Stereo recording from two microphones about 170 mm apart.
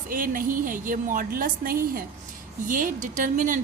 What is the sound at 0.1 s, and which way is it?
A woman's voice, 55° right (ahead or behind).